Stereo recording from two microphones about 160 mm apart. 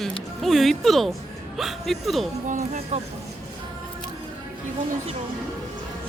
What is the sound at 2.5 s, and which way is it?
Speech, 45° right (ahead or behind).